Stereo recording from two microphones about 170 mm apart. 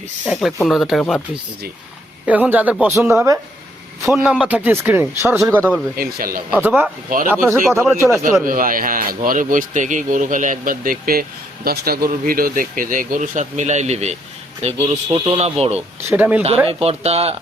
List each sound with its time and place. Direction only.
0.3 s speech: centre (ahead or behind)
2.2 s speech: 10° right (ahead or behind)
6.0 s speech: 60° right (ahead or behind)
6.5 s speech: 10° right (ahead or behind)
8.4 s speech: 55° right (ahead or behind); by 15.8 s 35° right (ahead or behind)
16.0 s speech: 10° right (ahead or behind)
16.6 s speech: 35° right (ahead or behind)